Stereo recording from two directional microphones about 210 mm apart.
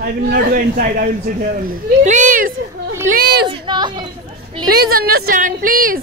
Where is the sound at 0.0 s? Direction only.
45° right (ahead or behind).